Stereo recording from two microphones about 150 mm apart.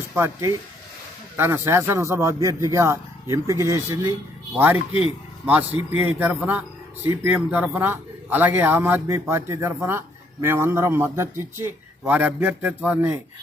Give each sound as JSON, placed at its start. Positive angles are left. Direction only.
{"t": 0.1, "sound": "speech", "side_deg": -15}